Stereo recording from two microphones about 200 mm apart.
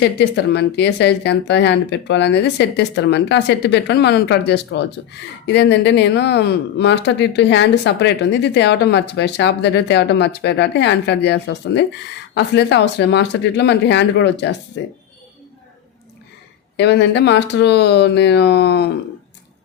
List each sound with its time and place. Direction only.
0.0 s speech: 60° left (ahead or behind)
16.7 s speech: 60° left (ahead or behind)